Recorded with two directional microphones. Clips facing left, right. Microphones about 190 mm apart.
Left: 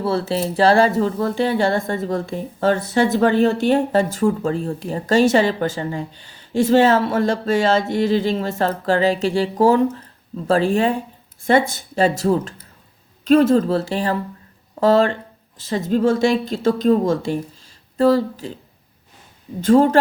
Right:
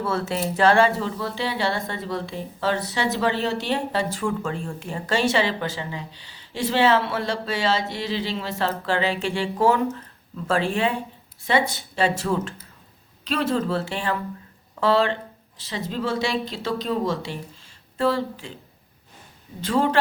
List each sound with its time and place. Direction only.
0.0 s speech: 30° left (ahead or behind)
19.6 s speech: 45° left (ahead or behind)